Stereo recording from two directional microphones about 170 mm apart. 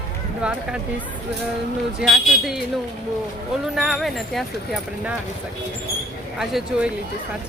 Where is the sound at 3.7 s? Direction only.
Centre (ahead or behind).